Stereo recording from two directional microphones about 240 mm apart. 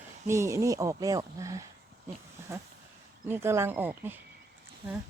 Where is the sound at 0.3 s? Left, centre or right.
Centre.